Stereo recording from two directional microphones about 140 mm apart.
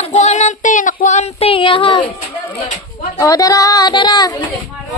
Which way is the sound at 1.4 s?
40° left (ahead or behind).